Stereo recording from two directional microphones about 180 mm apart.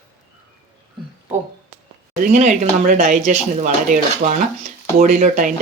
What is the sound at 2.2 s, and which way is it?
Speech, 45° right (ahead or behind).